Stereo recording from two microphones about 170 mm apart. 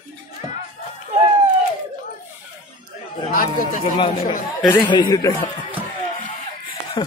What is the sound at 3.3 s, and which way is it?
Speech, 50° left (ahead or behind).